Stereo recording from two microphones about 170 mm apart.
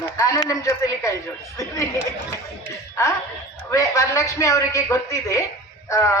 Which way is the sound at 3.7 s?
20° left (ahead or behind).